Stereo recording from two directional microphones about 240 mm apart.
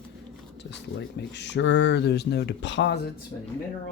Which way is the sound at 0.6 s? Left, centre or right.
Left.